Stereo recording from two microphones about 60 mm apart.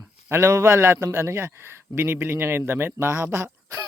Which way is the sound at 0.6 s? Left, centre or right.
Right.